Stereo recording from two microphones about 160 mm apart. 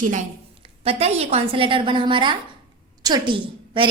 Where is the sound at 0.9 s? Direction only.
40° right (ahead or behind).